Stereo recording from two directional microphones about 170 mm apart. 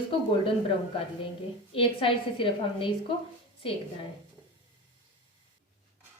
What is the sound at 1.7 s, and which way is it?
A woman's voice, 30° left (ahead or behind).